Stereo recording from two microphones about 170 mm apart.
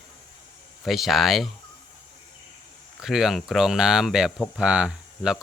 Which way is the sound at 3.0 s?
Centre (ahead or behind).